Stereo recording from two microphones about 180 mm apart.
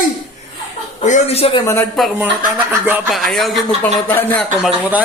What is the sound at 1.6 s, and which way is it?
Speech, 15° left (ahead or behind).